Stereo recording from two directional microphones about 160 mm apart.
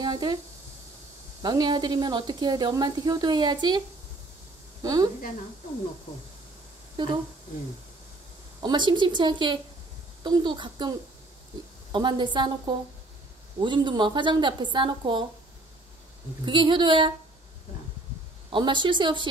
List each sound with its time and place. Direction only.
0.0 s speech: 25° right (ahead or behind)
1.4 s a woman's voice: 25° right (ahead or behind)
4.8 s a woman's voice: 25° right (ahead or behind)
7.0 s a woman's voice: 30° right (ahead or behind)
8.6 s a woman's voice: 30° right (ahead or behind)
16.4 s a woman's voice: 30° right (ahead or behind)
18.5 s a woman's voice: 30° right (ahead or behind)